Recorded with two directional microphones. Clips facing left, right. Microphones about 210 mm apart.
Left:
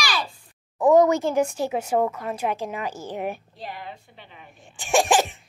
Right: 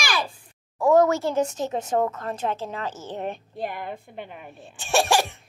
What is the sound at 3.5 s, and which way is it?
Speech, 55° right (ahead or behind).